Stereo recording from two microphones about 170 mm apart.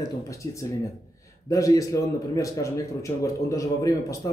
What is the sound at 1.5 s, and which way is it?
A man's voice, 20° left (ahead or behind).